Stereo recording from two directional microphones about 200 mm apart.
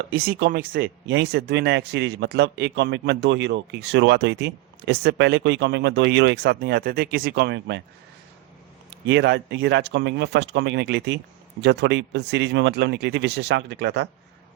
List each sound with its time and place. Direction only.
0.1 s speech: 50° right (ahead or behind)
9.0 s speech: 60° right (ahead or behind)